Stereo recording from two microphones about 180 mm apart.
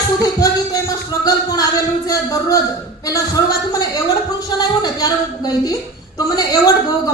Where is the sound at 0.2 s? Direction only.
20° left (ahead or behind).